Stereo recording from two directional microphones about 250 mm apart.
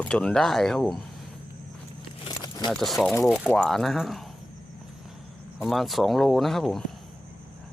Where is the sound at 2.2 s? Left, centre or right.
Centre.